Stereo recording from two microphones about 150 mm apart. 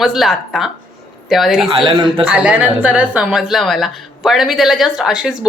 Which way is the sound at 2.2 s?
10° right (ahead or behind).